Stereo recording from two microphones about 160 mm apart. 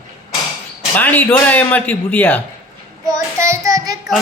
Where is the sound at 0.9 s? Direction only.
10° left (ahead or behind).